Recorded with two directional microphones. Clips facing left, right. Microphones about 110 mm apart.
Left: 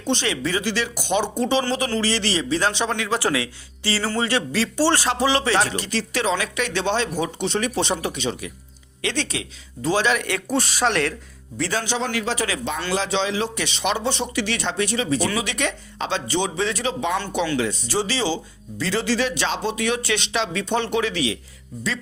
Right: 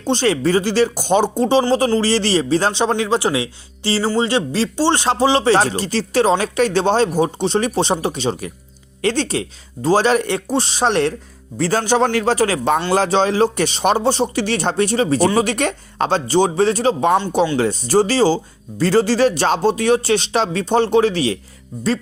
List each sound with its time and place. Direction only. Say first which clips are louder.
0.0 s speech: right 7 dB; 35° right (ahead or behind)